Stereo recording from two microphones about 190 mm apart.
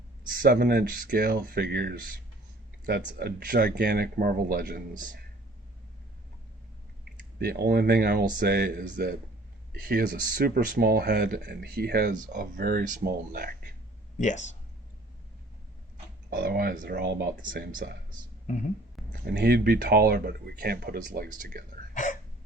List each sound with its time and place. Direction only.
0.3 s speech: 50° right (ahead or behind)
3.2 s speech: 55° right (ahead or behind)
7.0 s speech: 55° right (ahead or behind)
14.2 s speech: 40° left (ahead or behind)
16.3 s speech: 55° right (ahead or behind)
19.2 s speech: 60° right (ahead or behind)
21.9 s hiccup: 40° left (ahead or behind)